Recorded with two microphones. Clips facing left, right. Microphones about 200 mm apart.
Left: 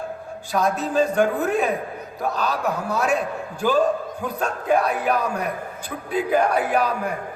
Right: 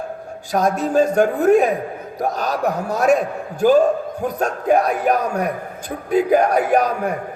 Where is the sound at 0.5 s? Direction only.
50° right (ahead or behind).